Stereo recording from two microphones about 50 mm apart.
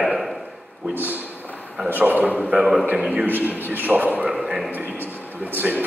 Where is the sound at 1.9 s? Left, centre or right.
Right.